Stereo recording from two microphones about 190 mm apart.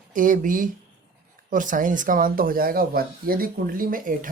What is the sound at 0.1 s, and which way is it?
Speech, 45° right (ahead or behind).